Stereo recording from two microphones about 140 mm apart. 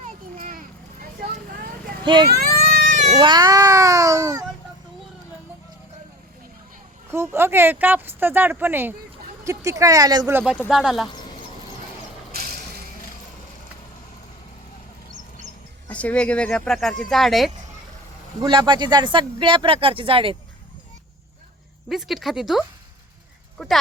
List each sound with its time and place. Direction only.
0.3 s a sound: 75° right (ahead or behind)
2.0 s speech: 30° right (ahead or behind)
2.3 s baby cry: 90° right; by 3.2 s 65° right (ahead or behind)
3.2 s speech: 30° right (ahead or behind)
7.1 s speech: 15° right (ahead or behind)
10.7 s speech: 5° right (ahead or behind)
12.3 s a sound: 90° right
15.9 s speech: 10° left (ahead or behind)
18.4 s speech: 35° right (ahead or behind)
21.8 s speech: centre (ahead or behind)